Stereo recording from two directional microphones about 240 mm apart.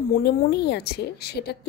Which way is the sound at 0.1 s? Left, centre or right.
Left.